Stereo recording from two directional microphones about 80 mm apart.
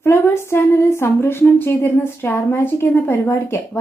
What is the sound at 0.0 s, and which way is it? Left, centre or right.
Speech, left.